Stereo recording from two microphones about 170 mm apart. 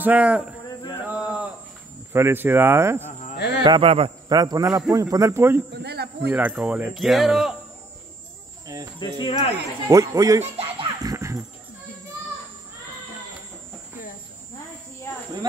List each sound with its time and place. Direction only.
0.0 s speech: 10° right (ahead or behind)
1.0 s a sound: 5° right (ahead or behind)
2.1 s speech: 15° right (ahead or behind)
3.3 s a sound: 80° left
3.6 s a man's voice: 30° right (ahead or behind)
4.4 s speech: 20° right (ahead or behind)
5.8 s a man's voice: 70° right (ahead or behind)
6.3 s speech: 10° right (ahead or behind)
8.7 s speech: 20° right (ahead or behind)
9.2 s speech: 35° left (ahead or behind)
9.8 s speech: 20° right (ahead or behind)
10.4 s music: 35° right (ahead or behind)
11.0 s music: 20° right (ahead or behind)